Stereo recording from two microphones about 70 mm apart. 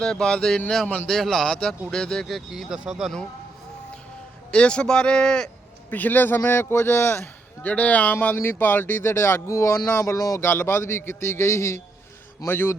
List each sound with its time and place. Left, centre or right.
0.0 s speech: centre
4.5 s speech: centre
5.9 s speech: left
7.6 s speech: left
10.4 s speech: left
12.5 s speech: left